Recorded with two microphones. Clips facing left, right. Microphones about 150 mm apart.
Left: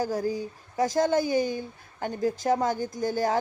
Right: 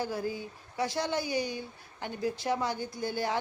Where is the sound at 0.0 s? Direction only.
40° left (ahead or behind).